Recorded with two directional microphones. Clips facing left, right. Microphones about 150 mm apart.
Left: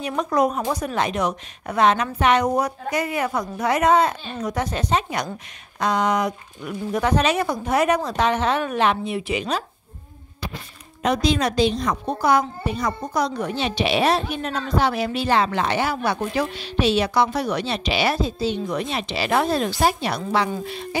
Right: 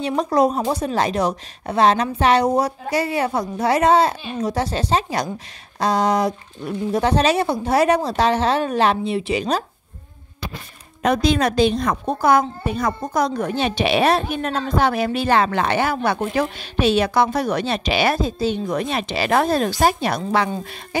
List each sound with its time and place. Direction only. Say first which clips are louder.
0.0 s speech: right 3 dB; 30° right (ahead or behind)
11.0 s a woman's voice: right 3 dB; 55° right (ahead or behind)